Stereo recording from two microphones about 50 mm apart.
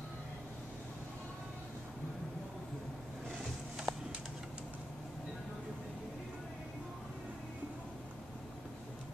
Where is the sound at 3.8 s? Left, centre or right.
Centre.